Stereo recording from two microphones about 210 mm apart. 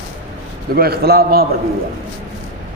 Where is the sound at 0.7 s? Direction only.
45° right (ahead or behind).